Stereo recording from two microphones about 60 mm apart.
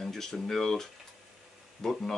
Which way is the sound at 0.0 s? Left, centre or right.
Centre.